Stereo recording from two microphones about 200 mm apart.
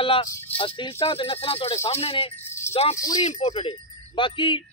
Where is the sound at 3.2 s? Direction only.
30° left (ahead or behind).